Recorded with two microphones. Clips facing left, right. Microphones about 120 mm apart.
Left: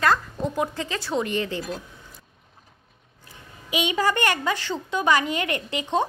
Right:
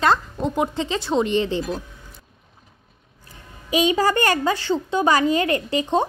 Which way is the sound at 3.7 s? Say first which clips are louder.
Right 5 dB; 35° right (ahead or behind).